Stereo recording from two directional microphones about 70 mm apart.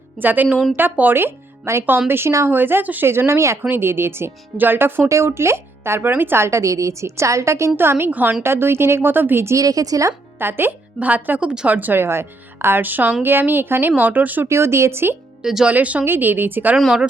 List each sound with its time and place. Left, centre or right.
0.2 s a woman's voice: right
3.1 s a woman's voice: right
3.6 s a woman's voice: right
5.0 s speech: right
7.8 s a woman's voice: right
9.6 s a woman's voice: right
10.3 s speech: right
14.4 s a woman's voice: right
15.4 s speech: centre
15.7 s speech: right
16.0 s speech: right
16.7 s speech: centre